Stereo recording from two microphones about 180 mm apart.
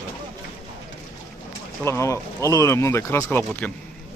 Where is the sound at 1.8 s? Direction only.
15° left (ahead or behind).